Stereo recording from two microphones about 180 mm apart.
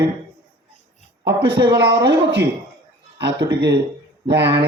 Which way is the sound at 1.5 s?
65° right (ahead or behind).